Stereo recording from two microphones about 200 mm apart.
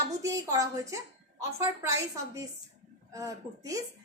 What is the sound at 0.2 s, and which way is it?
A woman's voice, 15° right (ahead or behind).